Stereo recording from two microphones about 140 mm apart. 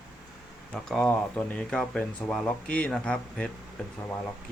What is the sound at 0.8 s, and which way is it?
Speech, 5° left (ahead or behind).